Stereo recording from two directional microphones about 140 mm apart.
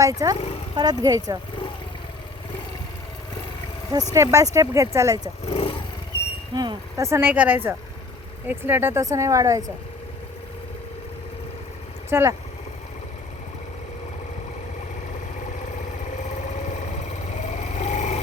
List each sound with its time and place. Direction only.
0.0 s speech: 25° right (ahead or behind)
4.1 s speech: 20° right (ahead or behind)
5.5 s vehicle: 45° left (ahead or behind)
6.5 s speech: 30° right (ahead or behind)
12.1 s speech: 15° right (ahead or behind)
17.3 s vehicle: 55° left (ahead or behind)